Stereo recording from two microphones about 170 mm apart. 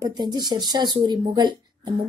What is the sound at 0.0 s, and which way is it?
A woman's voice, 25° right (ahead or behind).